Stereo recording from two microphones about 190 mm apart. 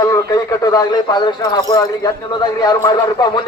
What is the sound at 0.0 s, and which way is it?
A man's voice, 20° left (ahead or behind).